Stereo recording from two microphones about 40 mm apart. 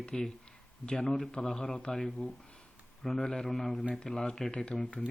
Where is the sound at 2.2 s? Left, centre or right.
Left.